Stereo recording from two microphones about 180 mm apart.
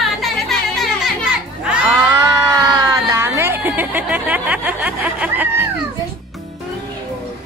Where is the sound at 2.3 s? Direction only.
20° right (ahead or behind).